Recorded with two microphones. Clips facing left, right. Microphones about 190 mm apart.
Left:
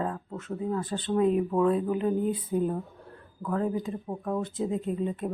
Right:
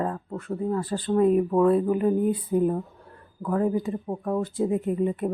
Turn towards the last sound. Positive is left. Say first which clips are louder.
# right 5 dB
turn(degrees=-10)  # may be behind; listen again after turning